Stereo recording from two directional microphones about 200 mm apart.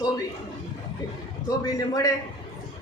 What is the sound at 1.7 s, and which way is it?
Speech, 20° left (ahead or behind).